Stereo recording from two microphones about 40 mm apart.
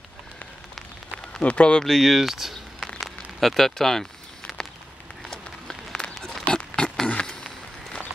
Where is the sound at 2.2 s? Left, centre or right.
Centre.